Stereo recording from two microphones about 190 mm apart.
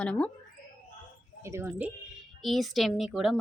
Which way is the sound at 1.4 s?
10° right (ahead or behind).